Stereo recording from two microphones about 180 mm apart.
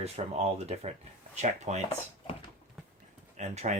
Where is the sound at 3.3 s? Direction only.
40° right (ahead or behind).